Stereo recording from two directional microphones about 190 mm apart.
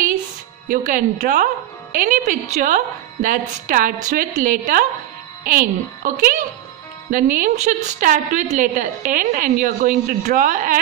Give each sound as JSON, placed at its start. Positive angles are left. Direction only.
{"t": 0.7, "sound": "a woman's voice", "side_deg": -45}